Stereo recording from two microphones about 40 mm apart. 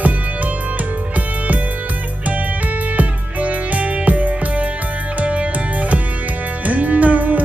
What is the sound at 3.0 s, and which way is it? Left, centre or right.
Music, right.